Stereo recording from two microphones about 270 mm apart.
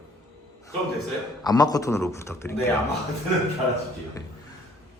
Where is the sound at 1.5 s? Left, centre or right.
Centre.